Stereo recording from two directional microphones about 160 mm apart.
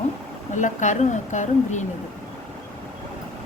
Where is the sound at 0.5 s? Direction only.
50° left (ahead or behind).